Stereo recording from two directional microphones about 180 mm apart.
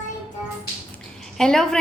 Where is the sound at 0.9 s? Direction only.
5° left (ahead or behind).